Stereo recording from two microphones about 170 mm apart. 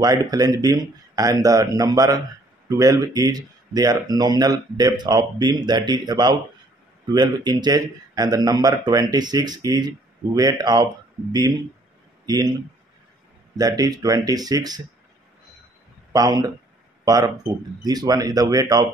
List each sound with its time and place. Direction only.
0.0 s speech: 20° right (ahead or behind)
13.6 s speech: 20° right (ahead or behind)
16.1 s speech: 20° right (ahead or behind)
17.8 s speech: 25° right (ahead or behind)